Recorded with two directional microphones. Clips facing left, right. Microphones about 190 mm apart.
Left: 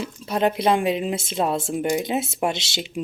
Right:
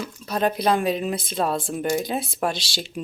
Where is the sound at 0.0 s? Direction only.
25° left (ahead or behind).